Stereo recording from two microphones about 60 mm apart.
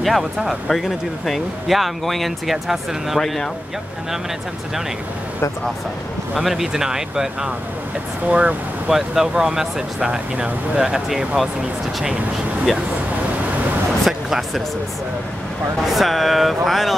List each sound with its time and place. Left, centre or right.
0.0 s speech: centre
3.2 s speech: centre
6.3 s speech: centre
8.3 s speech: right
8.8 s speech: centre
14.0 s speech: centre
15.8 s speech: centre